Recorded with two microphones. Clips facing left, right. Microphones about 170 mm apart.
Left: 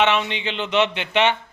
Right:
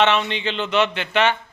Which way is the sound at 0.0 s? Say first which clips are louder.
Right 1 dB; 10° left (ahead or behind).